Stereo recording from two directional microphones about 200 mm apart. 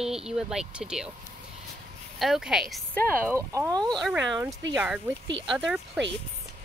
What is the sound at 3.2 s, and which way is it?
Speech, 15° right (ahead or behind).